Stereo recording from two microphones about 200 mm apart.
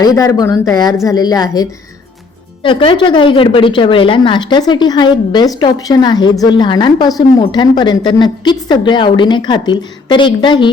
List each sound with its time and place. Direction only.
0.0 s speech: 15° left (ahead or behind)
2.6 s speech: 25° left (ahead or behind)